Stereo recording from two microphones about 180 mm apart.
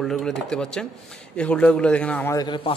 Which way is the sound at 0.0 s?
Centre (ahead or behind).